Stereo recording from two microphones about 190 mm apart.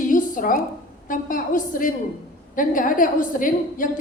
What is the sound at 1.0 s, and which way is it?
A woman's voice, 45° left (ahead or behind).